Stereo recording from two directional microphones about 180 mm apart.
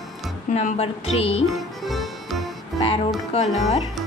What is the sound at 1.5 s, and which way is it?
Music, centre (ahead or behind).